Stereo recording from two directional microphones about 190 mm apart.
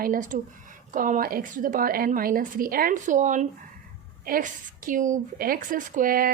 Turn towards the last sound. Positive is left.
turn(degrees=-50)  # may be behind; listen again after turning